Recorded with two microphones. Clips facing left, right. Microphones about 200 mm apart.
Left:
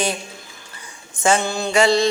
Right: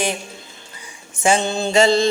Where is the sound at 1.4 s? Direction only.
25° right (ahead or behind).